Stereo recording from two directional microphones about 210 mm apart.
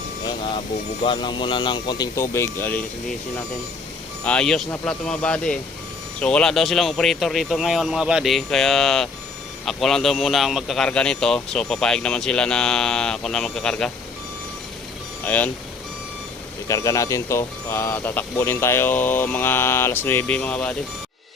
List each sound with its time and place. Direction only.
0.3 s vehicle: 25° left (ahead or behind)
1.0 s speech: 20° left (ahead or behind)
4.2 s a man's voice: 5° left (ahead or behind)
15.2 s speech: 5° left (ahead or behind)
16.6 s speech: 15° left (ahead or behind)